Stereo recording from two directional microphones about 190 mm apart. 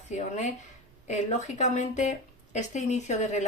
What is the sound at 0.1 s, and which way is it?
Speech, 40° left (ahead or behind).